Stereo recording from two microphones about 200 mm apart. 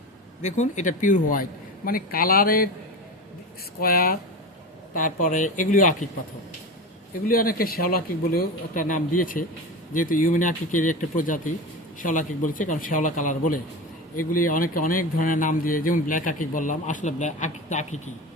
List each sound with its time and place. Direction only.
0.4 s speech: 35° left (ahead or behind)
3.8 s speech: 50° left (ahead or behind)
7.1 s speech: 45° left (ahead or behind)